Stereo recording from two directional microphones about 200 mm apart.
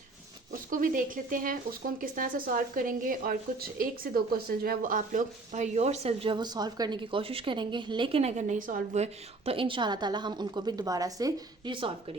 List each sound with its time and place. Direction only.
0.5 s a woman's voice: 45° right (ahead or behind); by 12.1 s 25° right (ahead or behind)